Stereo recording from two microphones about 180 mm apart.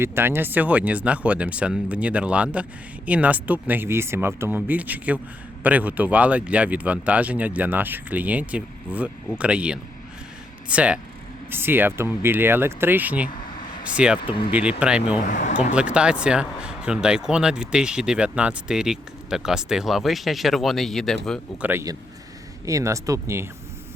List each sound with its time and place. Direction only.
0.0 s speech: 15° right (ahead or behind)
15.2 s speech: 45° left (ahead or behind)
15.7 s speech: 5° right (ahead or behind)
21.6 s speech: 15° right (ahead or behind)